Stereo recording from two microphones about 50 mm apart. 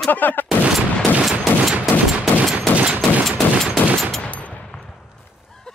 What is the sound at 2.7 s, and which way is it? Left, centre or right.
Fusillade, right.